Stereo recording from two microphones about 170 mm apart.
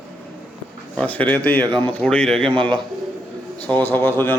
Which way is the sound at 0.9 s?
10° left (ahead or behind).